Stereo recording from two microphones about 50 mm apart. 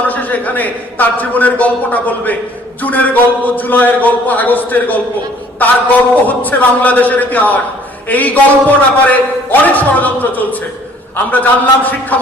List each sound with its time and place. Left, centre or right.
0.1 s a man's voice: left